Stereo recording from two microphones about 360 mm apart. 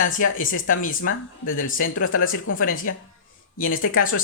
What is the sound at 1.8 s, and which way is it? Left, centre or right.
Speech, left.